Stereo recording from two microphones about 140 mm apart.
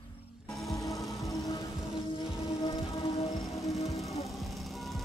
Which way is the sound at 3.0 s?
45° left (ahead or behind).